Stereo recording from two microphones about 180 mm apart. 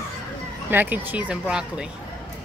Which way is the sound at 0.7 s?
10° right (ahead or behind).